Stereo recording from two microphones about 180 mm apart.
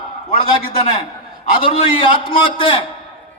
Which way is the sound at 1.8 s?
25° left (ahead or behind).